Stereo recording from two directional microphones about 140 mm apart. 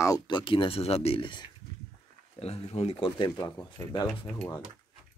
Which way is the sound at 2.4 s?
45° left (ahead or behind).